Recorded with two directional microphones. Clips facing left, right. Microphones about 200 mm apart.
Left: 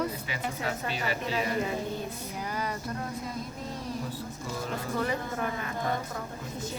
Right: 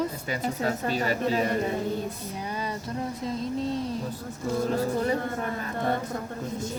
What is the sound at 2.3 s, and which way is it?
Speech, 25° right (ahead or behind).